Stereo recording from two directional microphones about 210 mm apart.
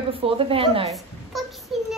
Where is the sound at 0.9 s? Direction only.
Centre (ahead or behind).